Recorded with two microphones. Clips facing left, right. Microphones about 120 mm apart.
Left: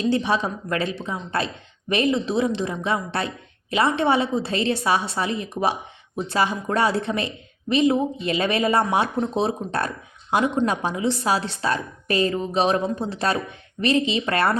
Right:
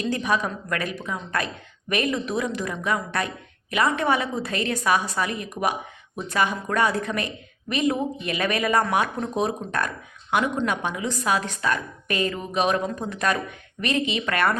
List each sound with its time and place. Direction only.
0.0 s a woman's voice: 30° left (ahead or behind)